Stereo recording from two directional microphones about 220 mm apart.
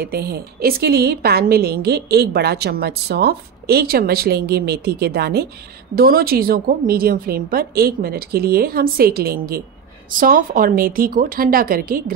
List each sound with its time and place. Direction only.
0.0 s a woman's voice: 45° right (ahead or behind)